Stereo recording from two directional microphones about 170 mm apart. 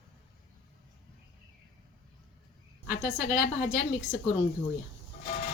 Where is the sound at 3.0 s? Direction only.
65° left (ahead or behind).